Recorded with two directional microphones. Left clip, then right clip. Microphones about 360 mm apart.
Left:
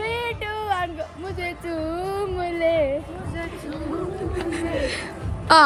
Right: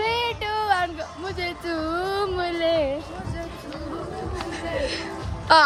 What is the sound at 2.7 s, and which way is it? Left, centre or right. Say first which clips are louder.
Speech: left 2 dB; centre.